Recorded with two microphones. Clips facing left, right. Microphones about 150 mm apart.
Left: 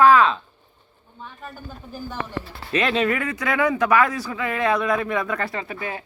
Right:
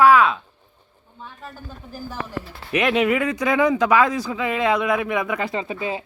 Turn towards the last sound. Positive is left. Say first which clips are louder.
# right 4 dB
turn(degrees=-20)  # may be behind; listen again after turning